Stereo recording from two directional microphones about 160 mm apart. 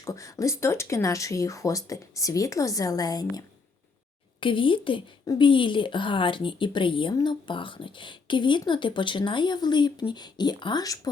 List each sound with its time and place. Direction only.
0.0 s speech: 20° left (ahead or behind)